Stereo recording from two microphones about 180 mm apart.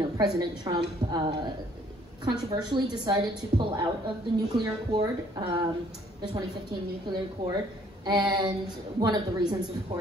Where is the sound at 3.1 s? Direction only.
25° right (ahead or behind).